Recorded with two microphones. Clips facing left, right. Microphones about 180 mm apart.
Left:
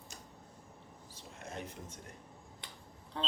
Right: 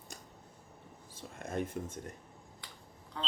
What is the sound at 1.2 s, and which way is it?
Speech, 50° right (ahead or behind).